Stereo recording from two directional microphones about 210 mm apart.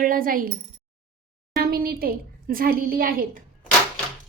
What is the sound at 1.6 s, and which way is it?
A woman's voice, 45° right (ahead or behind).